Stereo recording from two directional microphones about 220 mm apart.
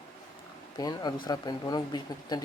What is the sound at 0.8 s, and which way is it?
Speech, 15° left (ahead or behind).